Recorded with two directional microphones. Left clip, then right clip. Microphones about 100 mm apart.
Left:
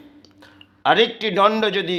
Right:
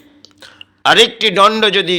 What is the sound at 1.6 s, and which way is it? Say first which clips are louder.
Speech: right 8 dB; 30° right (ahead or behind).